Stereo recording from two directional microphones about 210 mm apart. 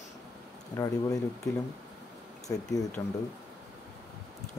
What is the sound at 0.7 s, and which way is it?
Speech, 15° left (ahead or behind).